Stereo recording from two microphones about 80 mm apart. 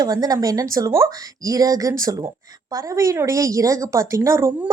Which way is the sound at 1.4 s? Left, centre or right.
Right.